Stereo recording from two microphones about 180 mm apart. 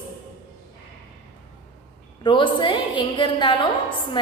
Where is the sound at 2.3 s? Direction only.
25° left (ahead or behind).